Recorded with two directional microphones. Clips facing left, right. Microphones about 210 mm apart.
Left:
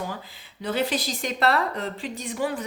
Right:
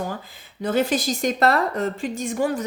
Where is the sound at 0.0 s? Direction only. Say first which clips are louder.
Right 4 dB; 45° right (ahead or behind).